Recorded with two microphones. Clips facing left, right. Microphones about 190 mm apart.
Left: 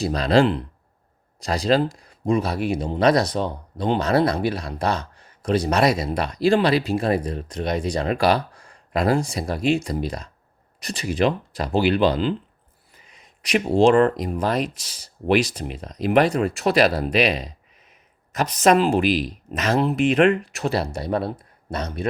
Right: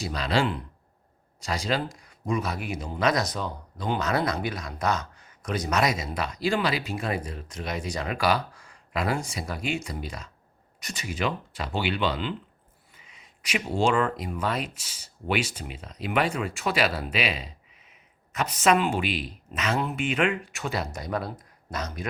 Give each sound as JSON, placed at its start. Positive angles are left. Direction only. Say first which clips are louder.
{"t": 0.0, "sound": "speech", "louder": "left 8 dB", "side_deg": 35}
{"t": 12.9, "sound": "a sound", "louder": "left 4 dB", "side_deg": 40}
{"t": 14.0, "sound": "speech", "louder": "left 8 dB", "side_deg": 40}